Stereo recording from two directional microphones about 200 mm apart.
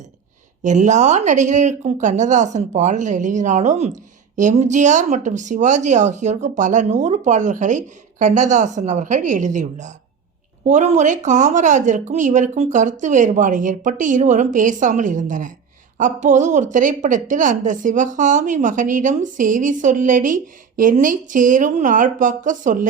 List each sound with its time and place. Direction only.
0.6 s a woman's voice: 40° right (ahead or behind)